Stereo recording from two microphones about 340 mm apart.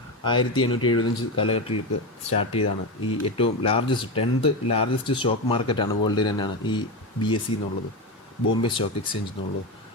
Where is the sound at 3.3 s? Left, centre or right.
Centre.